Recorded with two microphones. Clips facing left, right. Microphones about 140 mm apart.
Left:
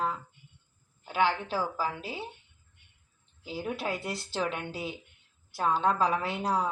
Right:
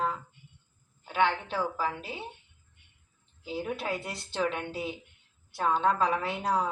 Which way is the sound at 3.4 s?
Centre (ahead or behind).